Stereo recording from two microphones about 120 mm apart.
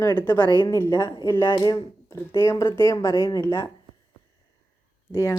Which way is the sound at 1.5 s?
35° left (ahead or behind).